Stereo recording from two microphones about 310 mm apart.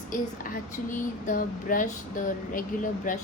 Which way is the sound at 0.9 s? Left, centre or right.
Left.